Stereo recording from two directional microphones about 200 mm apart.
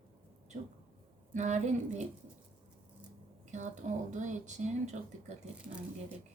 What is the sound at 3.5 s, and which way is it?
Speech, 35° right (ahead or behind).